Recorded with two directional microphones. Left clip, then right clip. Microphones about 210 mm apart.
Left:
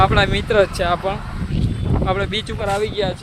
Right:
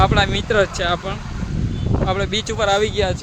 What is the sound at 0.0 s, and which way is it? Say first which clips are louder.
Speech: left 1 dB; 10° left (ahead or behind).